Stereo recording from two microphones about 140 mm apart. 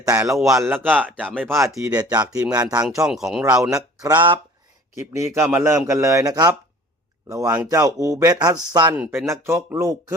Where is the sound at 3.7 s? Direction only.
25° right (ahead or behind).